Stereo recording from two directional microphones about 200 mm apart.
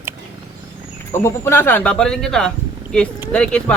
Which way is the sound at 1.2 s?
15° left (ahead or behind).